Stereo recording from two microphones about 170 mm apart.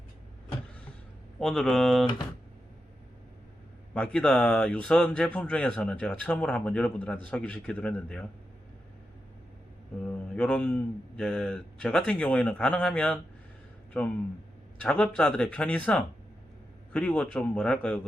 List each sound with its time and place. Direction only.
1.4 s a man's voice: 5° left (ahead or behind)
3.9 s speech: 5° left (ahead or behind)
10.1 s speech: 5° left (ahead or behind)